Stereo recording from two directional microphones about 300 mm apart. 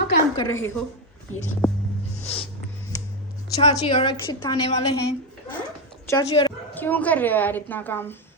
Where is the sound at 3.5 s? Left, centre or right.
Left.